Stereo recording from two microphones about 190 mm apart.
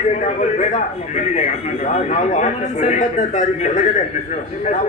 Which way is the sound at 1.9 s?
40° left (ahead or behind).